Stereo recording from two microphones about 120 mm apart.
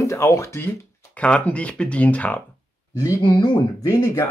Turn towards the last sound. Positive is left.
turn(degrees=25)  # may be behind; listen again after turning